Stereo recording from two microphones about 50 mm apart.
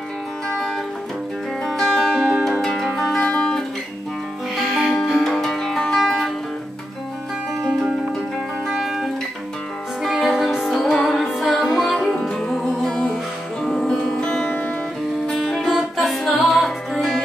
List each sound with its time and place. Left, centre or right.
1.7 s music: centre
3.3 s guitar: centre
4.6 s music: centre
8.7 s music: centre
10.1 s music: centre
10.8 s music: centre
11.2 s music: centre